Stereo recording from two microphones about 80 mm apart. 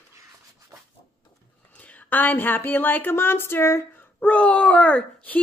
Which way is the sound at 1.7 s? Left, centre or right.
Centre.